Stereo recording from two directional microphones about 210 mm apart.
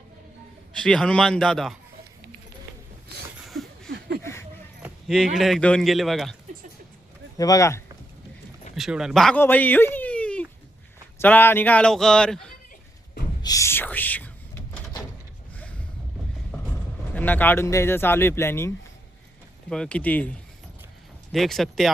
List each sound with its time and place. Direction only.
0.7 s speech: 5° left (ahead or behind)
3.4 s a sound: centre (ahead or behind)
4.2 s a sound: 10° left (ahead or behind)
4.8 s speech: centre (ahead or behind)
7.3 s speech: 15° left (ahead or behind)
8.7 s speech: centre (ahead or behind)
13.4 s a sound: 15° left (ahead or behind)
17.2 s speech: 10° left (ahead or behind)
19.7 s speech: 5° left (ahead or behind)
21.3 s speech: centre (ahead or behind)